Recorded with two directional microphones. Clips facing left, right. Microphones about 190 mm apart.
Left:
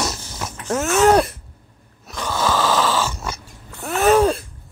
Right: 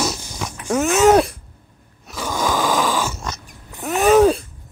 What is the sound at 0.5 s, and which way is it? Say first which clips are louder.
Groan: right 2 dB; 10° right (ahead or behind).